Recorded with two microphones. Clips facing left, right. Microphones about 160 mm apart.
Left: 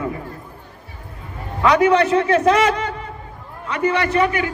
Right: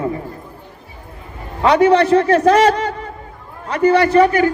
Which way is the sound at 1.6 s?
30° right (ahead or behind).